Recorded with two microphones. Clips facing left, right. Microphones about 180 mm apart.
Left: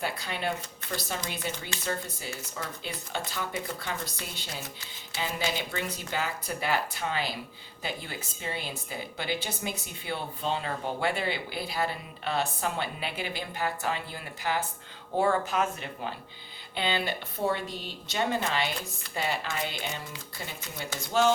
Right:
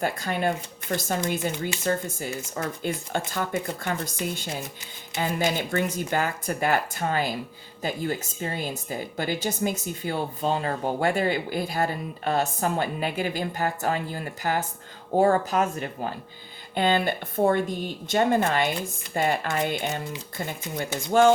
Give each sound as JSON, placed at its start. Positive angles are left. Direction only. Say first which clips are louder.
{"t": 0.0, "sound": "speech", "louder": "right 7 dB", "side_deg": -50}
{"t": 5.5, "sound": "speech", "louder": "right 8 dB", "side_deg": -50}